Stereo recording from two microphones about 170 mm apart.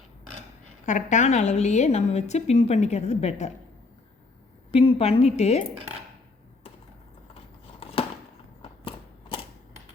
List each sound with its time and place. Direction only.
0.9 s a woman's voice: 45° left (ahead or behind)
4.7 s a woman's voice: 35° left (ahead or behind)
8.0 s a sound: 35° left (ahead or behind)